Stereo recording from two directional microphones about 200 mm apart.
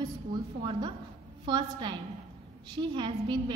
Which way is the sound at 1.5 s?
25° right (ahead or behind).